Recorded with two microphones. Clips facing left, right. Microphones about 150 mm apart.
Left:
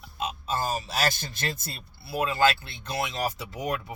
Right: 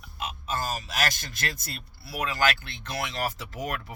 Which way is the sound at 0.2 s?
25° left (ahead or behind).